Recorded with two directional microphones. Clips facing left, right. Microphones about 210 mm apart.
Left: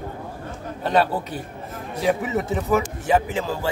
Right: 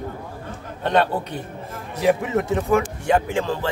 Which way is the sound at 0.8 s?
5° left (ahead or behind).